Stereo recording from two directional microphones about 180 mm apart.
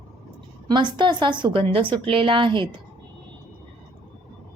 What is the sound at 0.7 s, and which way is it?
A woman's voice, 25° right (ahead or behind).